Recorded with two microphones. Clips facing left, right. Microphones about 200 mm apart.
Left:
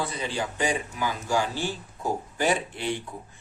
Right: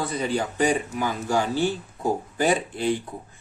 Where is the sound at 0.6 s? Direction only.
40° right (ahead or behind).